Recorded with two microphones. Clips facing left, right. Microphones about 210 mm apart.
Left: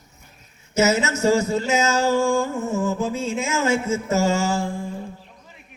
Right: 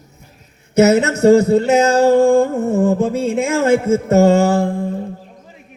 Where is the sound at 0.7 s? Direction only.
60° right (ahead or behind).